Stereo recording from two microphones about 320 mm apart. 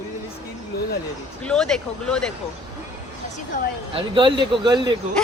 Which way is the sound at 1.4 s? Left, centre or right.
Centre.